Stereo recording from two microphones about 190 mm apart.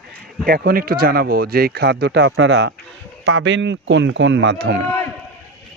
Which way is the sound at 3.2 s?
75° right (ahead or behind).